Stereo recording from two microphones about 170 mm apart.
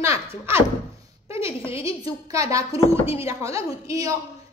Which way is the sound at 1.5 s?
35° left (ahead or behind).